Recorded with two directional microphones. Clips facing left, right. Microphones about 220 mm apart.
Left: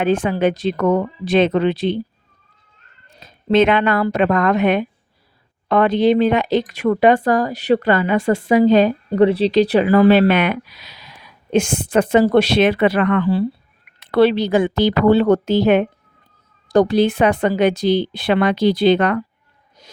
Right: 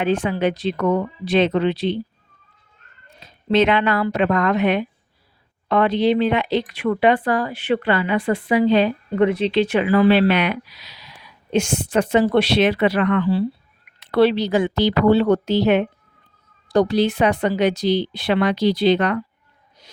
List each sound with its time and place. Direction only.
0.0 s speech: 50° left (ahead or behind)
3.2 s speech: 50° left (ahead or behind)